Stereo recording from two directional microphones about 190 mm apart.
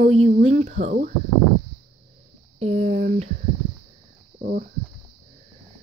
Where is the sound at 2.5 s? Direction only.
35° right (ahead or behind).